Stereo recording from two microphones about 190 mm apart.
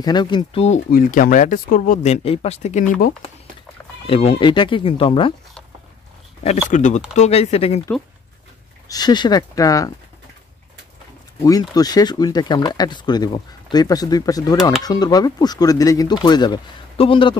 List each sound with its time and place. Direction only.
0.0 s speech: 20° left (ahead or behind)
0.9 s speech: 45° left (ahead or behind)
4.1 s speech: 30° left (ahead or behind)
6.7 s speech: 40° left (ahead or behind)
8.8 s speech: 20° left (ahead or behind)
11.4 s speech: 20° left (ahead or behind)